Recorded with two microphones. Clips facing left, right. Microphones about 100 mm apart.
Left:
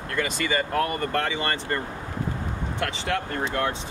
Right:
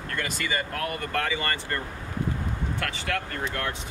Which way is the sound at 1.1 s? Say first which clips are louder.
Left 2 dB; 20° left (ahead or behind).